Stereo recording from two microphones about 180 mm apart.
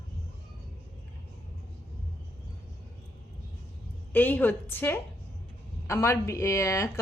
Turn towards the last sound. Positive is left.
turn(degrees=15)  # may be behind; listen again after turning